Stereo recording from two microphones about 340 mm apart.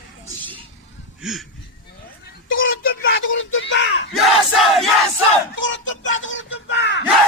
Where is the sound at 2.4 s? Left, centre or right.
Left.